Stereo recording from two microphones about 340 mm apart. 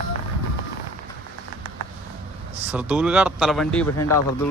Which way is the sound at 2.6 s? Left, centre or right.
Centre.